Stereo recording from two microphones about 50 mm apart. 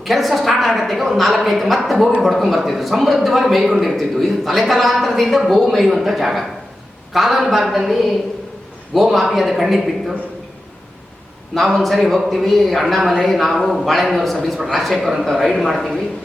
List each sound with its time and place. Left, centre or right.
0.0 s a man's voice: centre
11.5 s a man's voice: centre